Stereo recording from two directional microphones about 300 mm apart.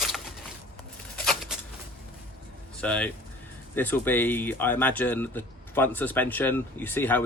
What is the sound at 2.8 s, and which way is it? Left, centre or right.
Speech, centre.